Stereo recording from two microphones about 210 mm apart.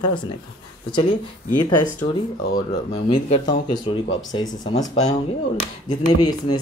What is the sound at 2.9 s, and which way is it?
Speech, 25° left (ahead or behind).